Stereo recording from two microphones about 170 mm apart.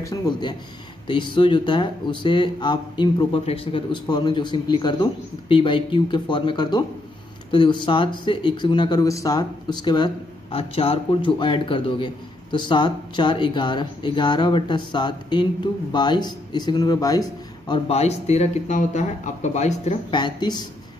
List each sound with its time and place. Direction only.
0.1 s a man's voice: 25° left (ahead or behind); by 20.0 s 40° left (ahead or behind)
20.1 s speech: 25° left (ahead or behind)